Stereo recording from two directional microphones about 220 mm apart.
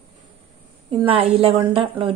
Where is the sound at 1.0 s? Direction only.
25° right (ahead or behind).